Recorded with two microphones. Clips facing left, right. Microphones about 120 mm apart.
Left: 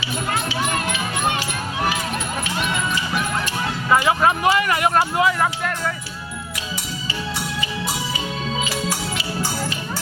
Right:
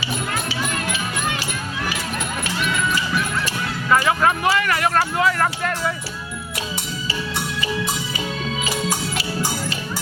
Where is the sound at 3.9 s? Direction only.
20° left (ahead or behind).